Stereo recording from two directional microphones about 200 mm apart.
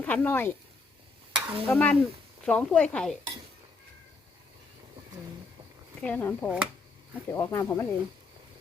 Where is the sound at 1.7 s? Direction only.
10° left (ahead or behind).